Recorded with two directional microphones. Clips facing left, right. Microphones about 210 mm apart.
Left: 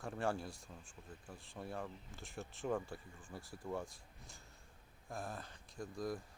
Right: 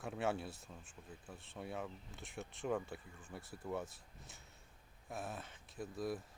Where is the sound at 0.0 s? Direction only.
5° right (ahead or behind).